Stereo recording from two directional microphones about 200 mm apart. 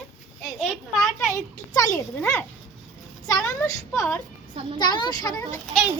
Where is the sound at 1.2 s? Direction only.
15° left (ahead or behind).